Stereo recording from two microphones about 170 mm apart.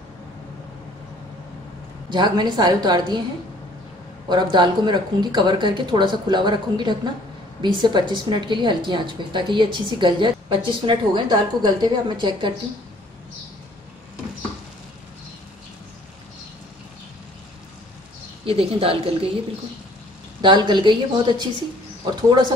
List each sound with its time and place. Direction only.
2.0 s a woman's voice: 25° right (ahead or behind)
4.3 s a woman's voice: 25° right (ahead or behind)
18.4 s a woman's voice: 35° right (ahead or behind)
20.4 s a woman's voice: 25° right (ahead or behind)